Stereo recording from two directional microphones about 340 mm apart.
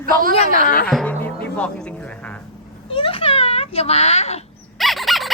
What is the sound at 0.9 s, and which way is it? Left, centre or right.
Music, centre.